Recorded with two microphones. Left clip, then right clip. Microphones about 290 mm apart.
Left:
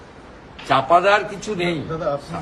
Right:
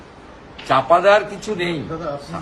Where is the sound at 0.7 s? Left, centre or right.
Centre.